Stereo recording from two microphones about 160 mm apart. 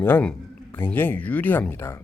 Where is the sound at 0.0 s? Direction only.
10° left (ahead or behind).